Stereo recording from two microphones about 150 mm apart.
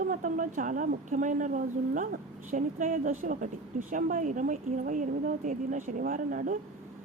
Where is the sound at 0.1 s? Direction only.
60° right (ahead or behind).